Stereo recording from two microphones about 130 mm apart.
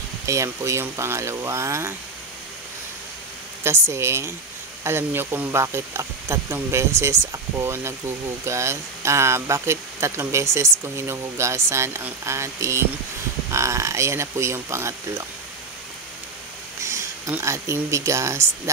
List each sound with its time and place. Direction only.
0.3 s speech: 25° right (ahead or behind)
3.6 s speech: 20° right (ahead or behind)
16.8 s speech: 20° right (ahead or behind)